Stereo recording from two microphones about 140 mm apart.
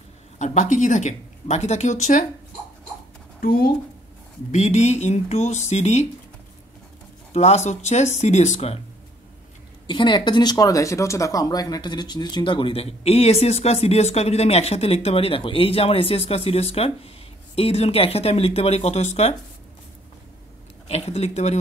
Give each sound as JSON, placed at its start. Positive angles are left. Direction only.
{"t": 0.4, "sound": "speech", "side_deg": 60}
{"t": 3.3, "sound": "speech", "side_deg": 90}
{"t": 4.5, "sound": "speech", "side_deg": 55}
{"t": 7.3, "sound": "speech", "side_deg": 50}
{"t": 9.8, "sound": "speech", "side_deg": 35}
{"t": 20.9, "sound": "speech", "side_deg": 50}